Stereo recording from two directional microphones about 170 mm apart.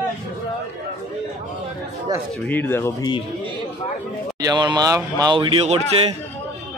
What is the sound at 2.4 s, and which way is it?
Speech, 10° left (ahead or behind).